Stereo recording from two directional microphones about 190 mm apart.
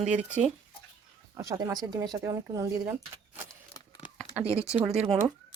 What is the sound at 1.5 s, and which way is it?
Speech, 20° right (ahead or behind).